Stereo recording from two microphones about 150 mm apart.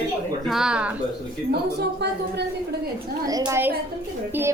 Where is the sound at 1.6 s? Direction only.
90° right.